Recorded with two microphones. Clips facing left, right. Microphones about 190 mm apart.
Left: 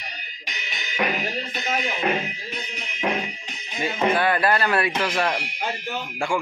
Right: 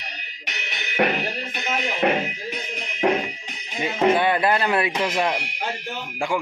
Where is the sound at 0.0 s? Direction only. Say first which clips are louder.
Even; 70° right (ahead or behind).